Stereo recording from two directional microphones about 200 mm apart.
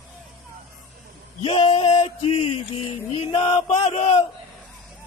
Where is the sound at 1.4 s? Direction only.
25° left (ahead or behind).